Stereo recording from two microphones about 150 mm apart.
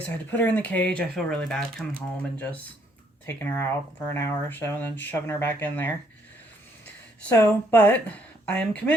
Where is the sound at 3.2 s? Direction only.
15° left (ahead or behind).